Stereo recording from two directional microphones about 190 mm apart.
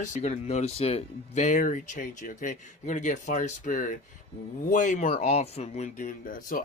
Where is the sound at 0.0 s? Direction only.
35° left (ahead or behind).